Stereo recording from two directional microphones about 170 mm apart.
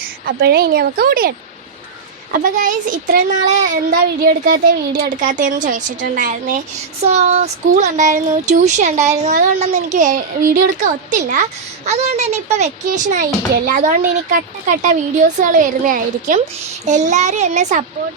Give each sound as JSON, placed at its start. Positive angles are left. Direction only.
{"t": 0.0, "sound": "a woman's voice", "side_deg": -70}
{"t": 2.3, "sound": "a woman's voice", "side_deg": -50}